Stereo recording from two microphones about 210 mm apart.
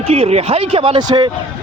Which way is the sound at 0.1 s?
30° right (ahead or behind).